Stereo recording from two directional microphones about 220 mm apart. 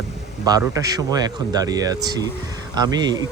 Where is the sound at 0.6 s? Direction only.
15° right (ahead or behind).